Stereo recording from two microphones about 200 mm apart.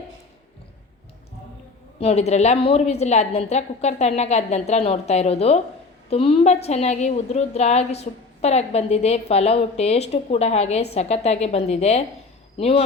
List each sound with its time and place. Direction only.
2.0 s a woman's voice: 30° left (ahead or behind)